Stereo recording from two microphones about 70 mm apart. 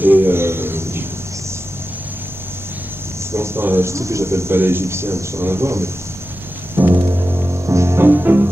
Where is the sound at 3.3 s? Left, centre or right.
Right.